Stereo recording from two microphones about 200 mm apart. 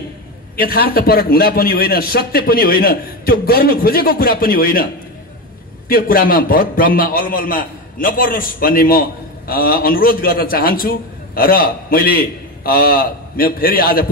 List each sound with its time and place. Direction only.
0.6 s a man's voice: 50° left (ahead or behind)
5.9 s a man's voice: 45° left (ahead or behind)